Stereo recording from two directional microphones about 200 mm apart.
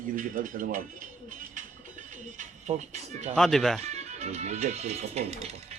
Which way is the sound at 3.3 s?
Centre (ahead or behind).